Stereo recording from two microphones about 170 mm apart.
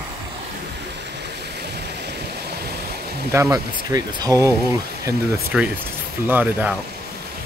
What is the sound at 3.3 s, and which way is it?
Speech, 15° right (ahead or behind).